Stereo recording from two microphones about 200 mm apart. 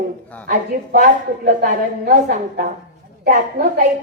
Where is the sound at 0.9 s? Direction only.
40° right (ahead or behind).